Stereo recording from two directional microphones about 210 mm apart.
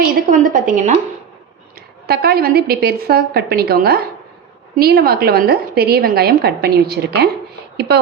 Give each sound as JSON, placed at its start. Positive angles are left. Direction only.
{"t": 0.3, "sound": "a woman's voice", "side_deg": -40}
{"t": 2.0, "sound": "a woman's voice", "side_deg": -45}